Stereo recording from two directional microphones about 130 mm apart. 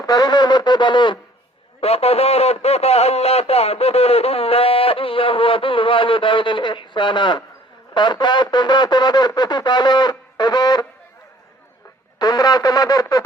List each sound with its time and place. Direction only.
0.0 s speech: 30° left (ahead or behind)
1.8 s speech: 50° left (ahead or behind); by 10.8 s 30° left (ahead or behind)
12.2 s a sound: 30° left (ahead or behind)